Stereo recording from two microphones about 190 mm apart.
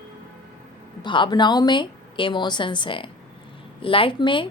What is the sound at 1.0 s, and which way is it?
A woman's voice, 25° left (ahead or behind).